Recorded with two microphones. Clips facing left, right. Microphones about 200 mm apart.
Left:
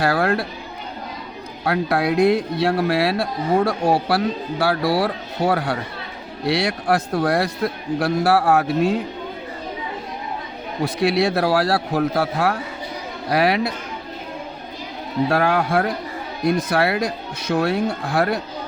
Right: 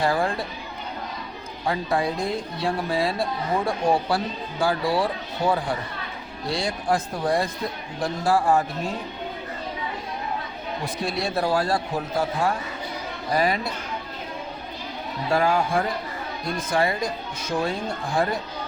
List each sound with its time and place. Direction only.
0.0 s a man's voice: 70° left (ahead or behind)
1.6 s a man's voice: 70° left (ahead or behind)
10.8 s a man's voice: 70° left (ahead or behind)
15.3 s a man's voice: 65° left (ahead or behind)